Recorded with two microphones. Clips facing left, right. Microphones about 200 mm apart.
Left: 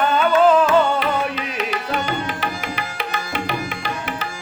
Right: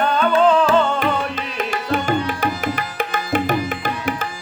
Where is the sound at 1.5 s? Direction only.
50° right (ahead or behind).